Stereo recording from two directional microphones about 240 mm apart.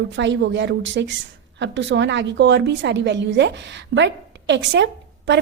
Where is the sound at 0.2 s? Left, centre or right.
Right.